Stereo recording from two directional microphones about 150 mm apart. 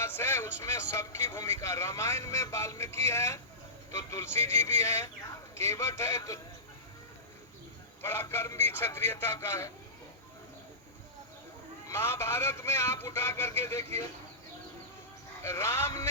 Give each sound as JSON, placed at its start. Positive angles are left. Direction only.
{"t": 0.0, "sound": "a man's voice", "side_deg": 15}
{"t": 8.0, "sound": "a man's voice", "side_deg": 15}
{"t": 11.9, "sound": "a man's voice", "side_deg": 15}
{"t": 15.4, "sound": "a man's voice", "side_deg": 20}